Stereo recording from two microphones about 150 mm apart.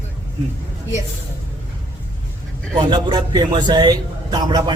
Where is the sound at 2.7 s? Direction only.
30° right (ahead or behind).